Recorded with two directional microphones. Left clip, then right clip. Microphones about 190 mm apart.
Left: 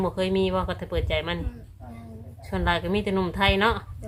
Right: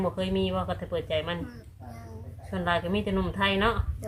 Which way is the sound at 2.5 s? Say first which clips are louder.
Left 3 dB; 45° left (ahead or behind).